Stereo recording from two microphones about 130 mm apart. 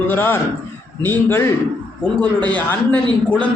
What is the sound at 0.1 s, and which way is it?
A man's voice, 15° left (ahead or behind).